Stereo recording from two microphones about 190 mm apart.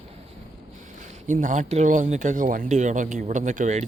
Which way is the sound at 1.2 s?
40° right (ahead or behind).